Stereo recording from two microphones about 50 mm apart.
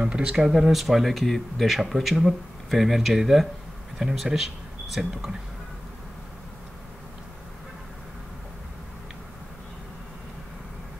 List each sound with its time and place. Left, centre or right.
0.0 s speech: centre
0.5 s speech: centre